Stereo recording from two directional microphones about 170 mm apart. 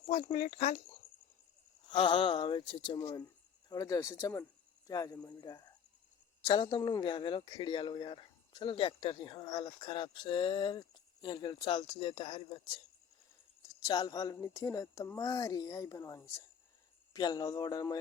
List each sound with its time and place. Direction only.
0.1 s speech: 40° left (ahead or behind)
1.9 s speech: 30° left (ahead or behind)